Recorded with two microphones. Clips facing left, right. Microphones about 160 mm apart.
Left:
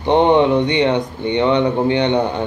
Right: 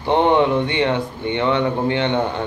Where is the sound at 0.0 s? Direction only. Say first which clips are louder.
Left 3 dB; 20° left (ahead or behind).